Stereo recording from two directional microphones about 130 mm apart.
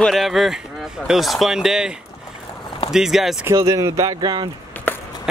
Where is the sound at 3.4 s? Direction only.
25° right (ahead or behind).